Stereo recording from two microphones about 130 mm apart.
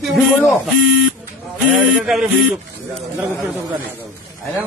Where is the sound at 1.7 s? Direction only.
5° right (ahead or behind).